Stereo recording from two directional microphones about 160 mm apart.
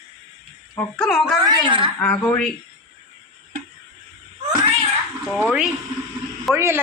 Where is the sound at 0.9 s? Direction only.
Centre (ahead or behind).